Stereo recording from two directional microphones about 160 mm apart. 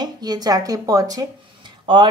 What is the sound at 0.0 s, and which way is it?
A woman's voice, 25° right (ahead or behind).